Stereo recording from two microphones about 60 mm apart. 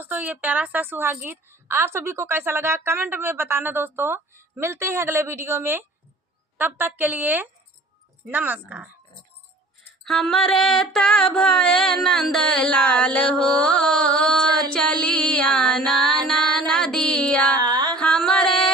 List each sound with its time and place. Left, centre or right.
0.0 s a woman's voice: right
10.0 s a sound: centre
17.6 s music: right
17.9 s music: centre